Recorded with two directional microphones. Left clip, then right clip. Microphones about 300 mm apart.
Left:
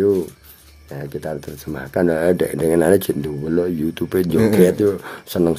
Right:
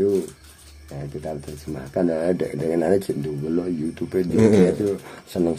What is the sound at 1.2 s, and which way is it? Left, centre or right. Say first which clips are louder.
Speech: left 4 dB; left.